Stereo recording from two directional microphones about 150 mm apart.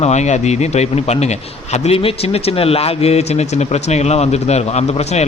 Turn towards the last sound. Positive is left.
turn(degrees=45)  # may be behind; listen again after turning